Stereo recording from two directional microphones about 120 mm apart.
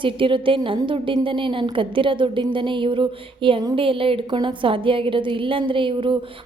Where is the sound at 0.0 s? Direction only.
45° right (ahead or behind).